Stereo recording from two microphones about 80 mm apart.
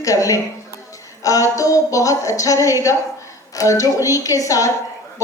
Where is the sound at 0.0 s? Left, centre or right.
Left.